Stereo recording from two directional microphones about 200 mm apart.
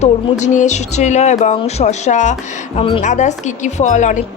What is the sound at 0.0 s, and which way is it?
A woman's voice, 35° left (ahead or behind).